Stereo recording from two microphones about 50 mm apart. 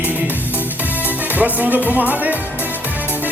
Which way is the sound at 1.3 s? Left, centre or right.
Right.